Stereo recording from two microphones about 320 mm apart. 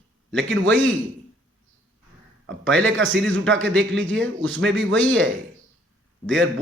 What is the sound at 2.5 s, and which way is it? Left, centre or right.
A man's voice, right.